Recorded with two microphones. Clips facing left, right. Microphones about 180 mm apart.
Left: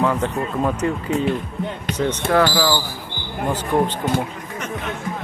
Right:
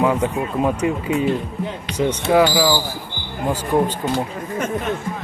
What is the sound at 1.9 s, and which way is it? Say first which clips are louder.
Speech: right 1 dB; 45° left (ahead or behind).